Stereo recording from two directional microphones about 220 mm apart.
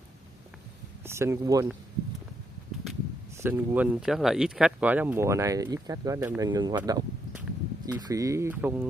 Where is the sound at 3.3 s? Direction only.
10° right (ahead or behind).